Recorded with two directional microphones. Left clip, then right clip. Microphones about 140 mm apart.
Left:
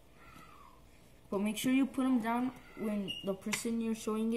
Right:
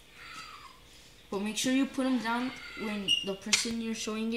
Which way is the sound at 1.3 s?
15° left (ahead or behind).